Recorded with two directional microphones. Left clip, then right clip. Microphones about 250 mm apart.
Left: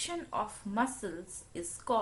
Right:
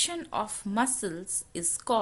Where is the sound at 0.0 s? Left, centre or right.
Right.